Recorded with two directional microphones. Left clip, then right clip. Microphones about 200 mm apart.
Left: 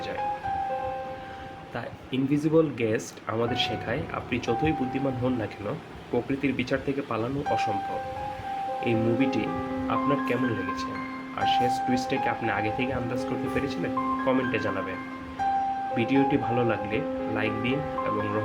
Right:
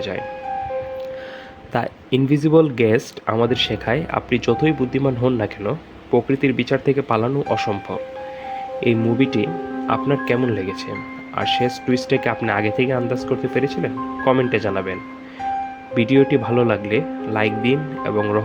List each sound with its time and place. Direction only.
1.7 s speech: 50° right (ahead or behind)
8.8 s speech: 40° right (ahead or behind)
16.0 s speech: 40° right (ahead or behind)